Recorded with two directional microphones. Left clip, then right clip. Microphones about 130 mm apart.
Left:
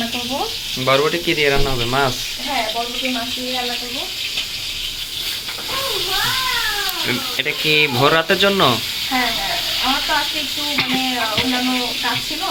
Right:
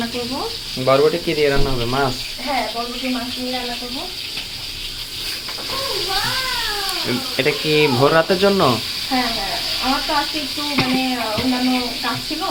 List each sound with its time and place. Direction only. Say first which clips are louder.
0.9 s speech: right 1 dB; centre (ahead or behind)
7.3 s speech: even; 20° right (ahead or behind)
7.9 s speech: even; 10° right (ahead or behind)